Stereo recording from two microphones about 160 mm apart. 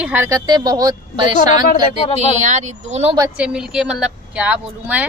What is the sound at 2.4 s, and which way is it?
Speech, 50° right (ahead or behind).